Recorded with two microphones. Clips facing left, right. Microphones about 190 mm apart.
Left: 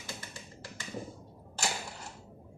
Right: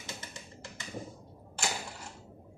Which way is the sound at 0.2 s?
25° right (ahead or behind).